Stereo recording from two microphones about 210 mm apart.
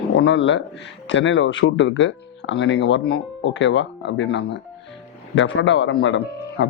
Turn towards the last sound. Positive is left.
turn(degrees=55)  # may be behind; listen again after turning